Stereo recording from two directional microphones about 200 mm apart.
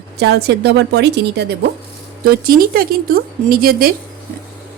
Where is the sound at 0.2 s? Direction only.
55° right (ahead or behind).